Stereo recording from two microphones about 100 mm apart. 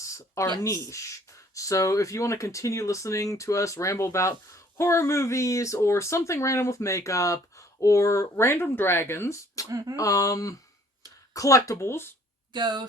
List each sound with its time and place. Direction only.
0.0 s a sound: 30° left (ahead or behind)
0.6 s speech: 30° left (ahead or behind)
9.6 s speech: 40° right (ahead or behind)
9.9 s speech: 35° left (ahead or behind)
12.5 s speech: 45° right (ahead or behind)